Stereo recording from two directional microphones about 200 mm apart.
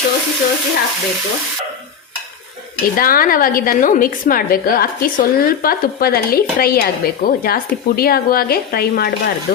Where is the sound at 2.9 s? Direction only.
45° left (ahead or behind).